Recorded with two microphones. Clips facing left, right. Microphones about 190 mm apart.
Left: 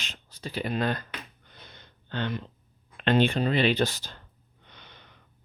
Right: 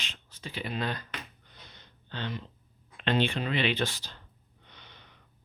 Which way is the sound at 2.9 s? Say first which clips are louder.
Left 5 dB; 50° left (ahead or behind).